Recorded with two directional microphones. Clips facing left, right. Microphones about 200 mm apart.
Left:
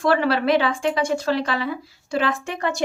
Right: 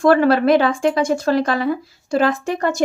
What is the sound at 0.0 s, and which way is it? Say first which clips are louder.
Speech: right 6 dB; 45° right (ahead or behind).